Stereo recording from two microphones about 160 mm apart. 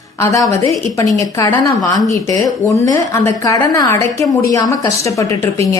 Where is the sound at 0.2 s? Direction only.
20° left (ahead or behind).